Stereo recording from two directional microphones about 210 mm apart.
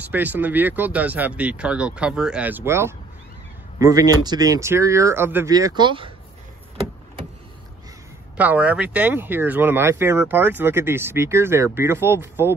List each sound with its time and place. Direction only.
0.1 s speech: 10° right (ahead or behind)
8.4 s speech: 5° right (ahead or behind)